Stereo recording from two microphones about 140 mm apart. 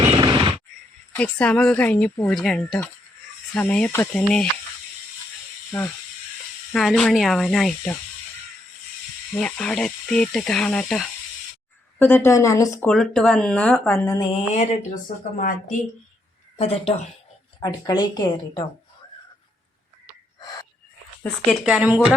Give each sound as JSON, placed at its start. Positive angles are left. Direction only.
{"t": 0.1, "sound": "a sound", "side_deg": -35}
{"t": 1.1, "sound": "a woman's voice", "side_deg": 10}
{"t": 2.3, "sound": "a woman's voice", "side_deg": 0}
{"t": 6.7, "sound": "speech", "side_deg": 5}
{"t": 9.4, "sound": "speech", "side_deg": 5}
{"t": 11.9, "sound": "speech", "side_deg": 15}
{"t": 12.8, "sound": "a woman's voice", "side_deg": 5}
{"t": 14.0, "sound": "speech", "side_deg": 20}
{"t": 14.5, "sound": "speech", "side_deg": 55}
{"t": 15.4, "sound": "a woman's voice", "side_deg": 75}
{"t": 16.6, "sound": "speech", "side_deg": 45}
{"t": 17.6, "sound": "speech", "side_deg": 30}
{"t": 21.5, "sound": "speech", "side_deg": -5}